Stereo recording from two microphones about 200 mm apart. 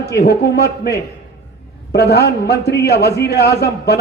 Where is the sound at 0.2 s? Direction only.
55° left (ahead or behind).